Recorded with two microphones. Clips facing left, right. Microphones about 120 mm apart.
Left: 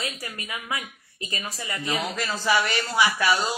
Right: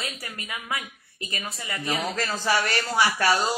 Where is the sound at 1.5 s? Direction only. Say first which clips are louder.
Left 1 dB; 25° left (ahead or behind).